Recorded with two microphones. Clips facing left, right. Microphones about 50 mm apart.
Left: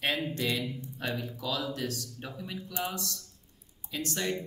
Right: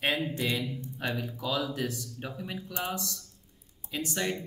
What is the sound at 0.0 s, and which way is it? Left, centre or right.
Speech, centre.